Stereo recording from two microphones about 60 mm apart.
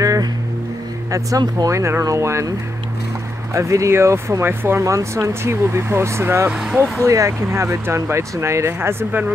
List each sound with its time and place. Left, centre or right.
0.0 s vehicle: right
1.1 s speech: right
3.5 s speech: right
4.8 s speech: right
7.1 s speech: right